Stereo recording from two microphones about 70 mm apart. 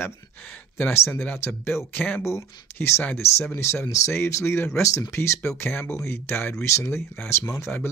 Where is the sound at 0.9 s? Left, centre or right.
Left.